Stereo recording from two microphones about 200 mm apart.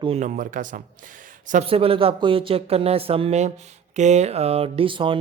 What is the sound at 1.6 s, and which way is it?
Speech, 30° right (ahead or behind).